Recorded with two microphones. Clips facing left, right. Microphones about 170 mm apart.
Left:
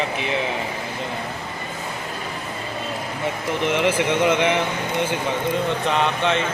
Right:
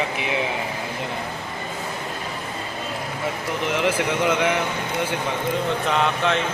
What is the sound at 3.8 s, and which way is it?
Speech, centre (ahead or behind).